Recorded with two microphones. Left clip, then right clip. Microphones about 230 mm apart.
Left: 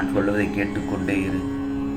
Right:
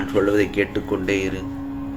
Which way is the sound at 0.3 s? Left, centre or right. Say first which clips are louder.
Right 4 dB; right.